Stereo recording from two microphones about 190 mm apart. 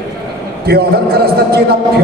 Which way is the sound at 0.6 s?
55° right (ahead or behind).